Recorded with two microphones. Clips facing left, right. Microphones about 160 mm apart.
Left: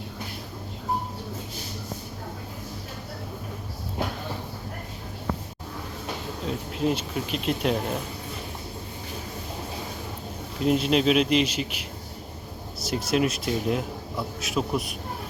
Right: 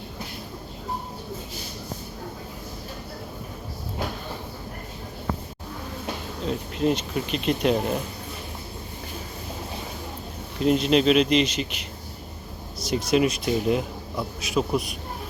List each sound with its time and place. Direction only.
6.4 s speech: 5° left (ahead or behind)
10.6 s speech: 5° left (ahead or behind)